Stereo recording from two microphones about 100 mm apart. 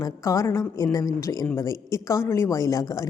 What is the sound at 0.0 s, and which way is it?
A woman's voice, 30° left (ahead or behind).